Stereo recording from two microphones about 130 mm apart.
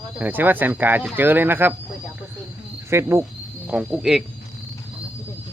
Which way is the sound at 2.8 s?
20° right (ahead or behind).